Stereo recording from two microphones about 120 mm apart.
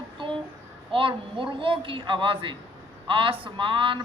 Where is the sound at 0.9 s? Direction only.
45° right (ahead or behind).